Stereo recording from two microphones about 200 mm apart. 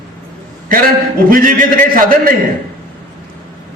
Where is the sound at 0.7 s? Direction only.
45° right (ahead or behind).